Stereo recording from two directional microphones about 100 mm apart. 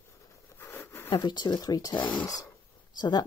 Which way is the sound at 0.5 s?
25° left (ahead or behind).